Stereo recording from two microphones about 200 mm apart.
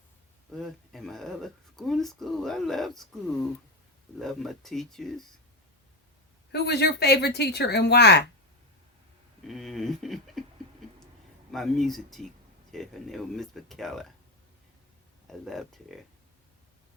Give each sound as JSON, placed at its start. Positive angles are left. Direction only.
{"t": 0.5, "sound": "speech", "side_deg": 0}
{"t": 4.2, "sound": "speech", "side_deg": 0}
{"t": 6.5, "sound": "speech", "side_deg": 55}
{"t": 9.5, "sound": "speech", "side_deg": 0}
{"t": 11.5, "sound": "speech", "side_deg": 0}
{"t": 15.3, "sound": "speech", "side_deg": 0}